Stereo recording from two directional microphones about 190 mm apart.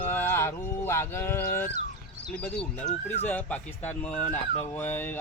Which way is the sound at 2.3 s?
5° left (ahead or behind).